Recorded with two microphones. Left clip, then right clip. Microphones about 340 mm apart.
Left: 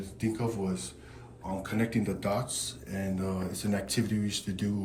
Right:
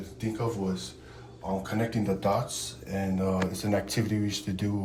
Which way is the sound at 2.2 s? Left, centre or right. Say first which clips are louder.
Right 4 dB; centre.